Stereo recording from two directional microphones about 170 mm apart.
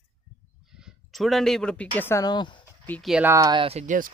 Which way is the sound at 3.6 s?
40° right (ahead or behind).